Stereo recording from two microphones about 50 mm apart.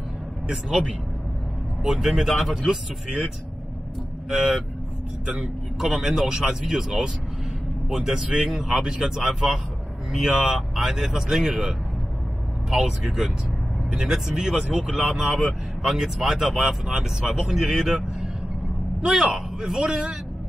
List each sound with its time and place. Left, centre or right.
0.5 s speech: centre
4.4 s speech: centre
12.7 s speech: centre